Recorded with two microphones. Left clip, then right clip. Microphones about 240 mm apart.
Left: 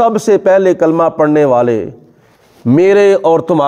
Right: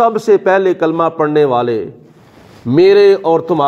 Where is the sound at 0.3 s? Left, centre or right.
Left.